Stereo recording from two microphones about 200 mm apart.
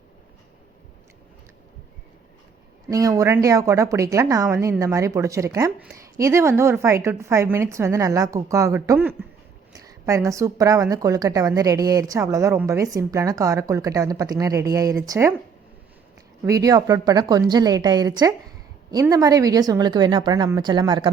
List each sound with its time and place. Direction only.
2.9 s a woman's voice: 15° right (ahead or behind)
16.5 s a woman's voice: 20° right (ahead or behind)